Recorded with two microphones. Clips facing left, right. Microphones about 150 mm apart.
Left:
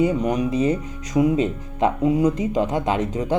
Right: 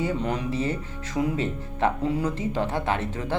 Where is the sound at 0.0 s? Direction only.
15° left (ahead or behind).